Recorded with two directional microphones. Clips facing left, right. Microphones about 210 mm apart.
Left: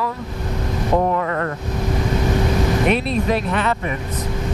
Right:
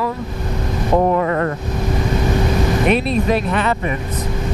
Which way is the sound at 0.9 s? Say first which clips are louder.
Right 4 dB; 25° right (ahead or behind).